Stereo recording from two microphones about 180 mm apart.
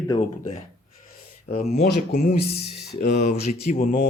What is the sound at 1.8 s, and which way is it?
Speech, 60° left (ahead or behind).